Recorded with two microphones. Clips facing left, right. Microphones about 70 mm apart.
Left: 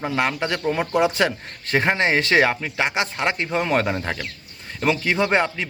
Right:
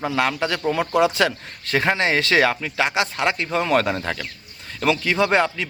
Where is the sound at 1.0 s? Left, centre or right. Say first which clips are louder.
Right 1 dB; left.